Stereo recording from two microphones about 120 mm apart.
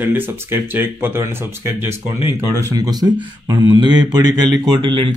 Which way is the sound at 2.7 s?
35° right (ahead or behind).